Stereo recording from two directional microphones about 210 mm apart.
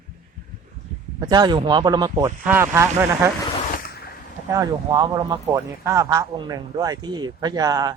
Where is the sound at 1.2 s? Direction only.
20° right (ahead or behind).